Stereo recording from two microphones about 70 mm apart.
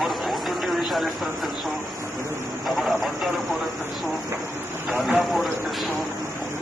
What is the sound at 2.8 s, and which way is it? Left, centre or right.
Speech, centre.